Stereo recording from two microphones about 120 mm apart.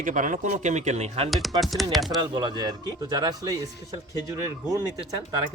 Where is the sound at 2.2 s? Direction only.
40° right (ahead or behind).